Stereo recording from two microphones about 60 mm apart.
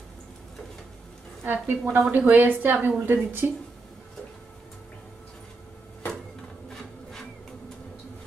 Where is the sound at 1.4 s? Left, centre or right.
Right.